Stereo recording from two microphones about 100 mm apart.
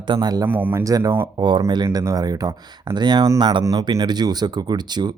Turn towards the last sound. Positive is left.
turn(degrees=-45)  # may be behind; listen again after turning